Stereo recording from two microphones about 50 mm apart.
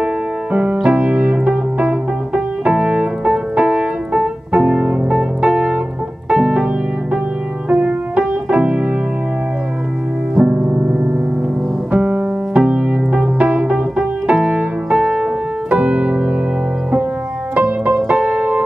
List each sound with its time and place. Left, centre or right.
0.5 s piano: right
4.5 s keyboard: centre
6.3 s piano: centre
7.7 s music: right
10.4 s music: centre
11.9 s piano: right
15.0 s music: centre
15.7 s music: right
17.6 s music: right
18.1 s keyboard: centre